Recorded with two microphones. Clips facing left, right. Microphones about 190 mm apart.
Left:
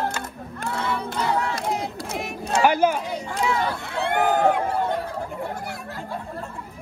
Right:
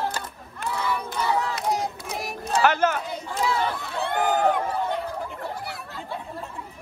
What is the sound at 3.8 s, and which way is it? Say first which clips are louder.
Chatter: left 3 dB; 55° left (ahead or behind).